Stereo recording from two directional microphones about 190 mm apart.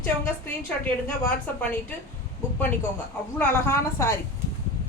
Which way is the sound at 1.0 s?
10° left (ahead or behind).